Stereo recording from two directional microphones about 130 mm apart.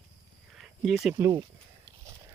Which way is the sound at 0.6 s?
5° right (ahead or behind).